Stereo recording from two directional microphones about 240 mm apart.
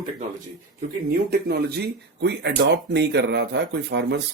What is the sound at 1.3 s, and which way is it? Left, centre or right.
Speech, right.